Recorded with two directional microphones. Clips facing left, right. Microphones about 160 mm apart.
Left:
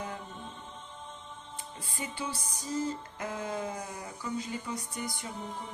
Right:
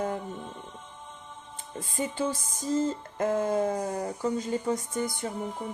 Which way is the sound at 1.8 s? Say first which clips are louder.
Right 9 dB; 45° right (ahead or behind).